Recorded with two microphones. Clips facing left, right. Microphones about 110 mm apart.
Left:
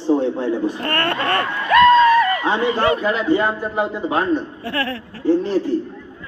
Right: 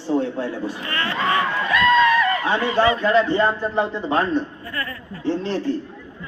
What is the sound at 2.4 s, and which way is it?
A man's voice, 15° left (ahead or behind).